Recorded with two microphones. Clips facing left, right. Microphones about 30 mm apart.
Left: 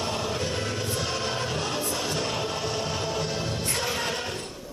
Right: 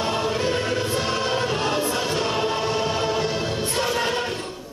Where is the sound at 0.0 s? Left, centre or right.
Right.